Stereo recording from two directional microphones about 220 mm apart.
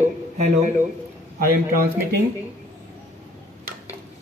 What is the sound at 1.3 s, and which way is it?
Speech, 40° right (ahead or behind).